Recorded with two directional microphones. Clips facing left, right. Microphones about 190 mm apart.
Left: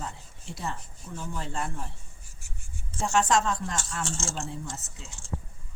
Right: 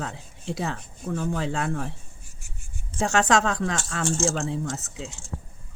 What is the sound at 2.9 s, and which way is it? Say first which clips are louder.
Speech: right 3 dB; 85° right.